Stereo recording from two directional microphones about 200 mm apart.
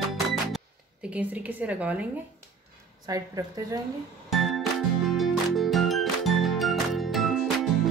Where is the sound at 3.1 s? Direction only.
20° right (ahead or behind).